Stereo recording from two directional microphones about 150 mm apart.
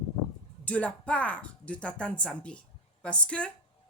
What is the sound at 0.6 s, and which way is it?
A woman's voice, 10° left (ahead or behind).